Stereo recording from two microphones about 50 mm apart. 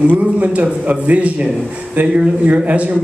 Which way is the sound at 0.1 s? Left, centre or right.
Right.